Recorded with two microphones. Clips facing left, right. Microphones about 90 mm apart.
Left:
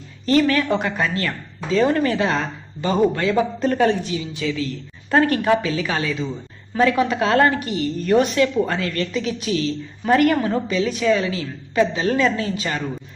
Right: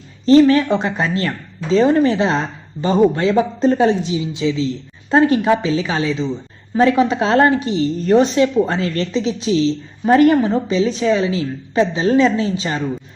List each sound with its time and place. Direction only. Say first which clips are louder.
0.3 s a woman's voice: right 7 dB; 25° right (ahead or behind)